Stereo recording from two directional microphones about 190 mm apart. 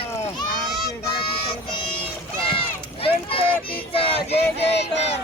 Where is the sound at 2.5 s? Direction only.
30° left (ahead or behind).